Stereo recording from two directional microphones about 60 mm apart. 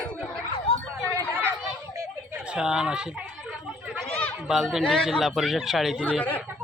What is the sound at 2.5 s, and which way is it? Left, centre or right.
Speech, centre.